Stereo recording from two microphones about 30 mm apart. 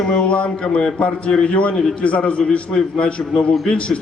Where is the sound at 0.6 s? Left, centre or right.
Left.